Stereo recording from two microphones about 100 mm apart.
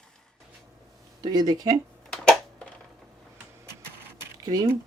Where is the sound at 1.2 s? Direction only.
45° right (ahead or behind).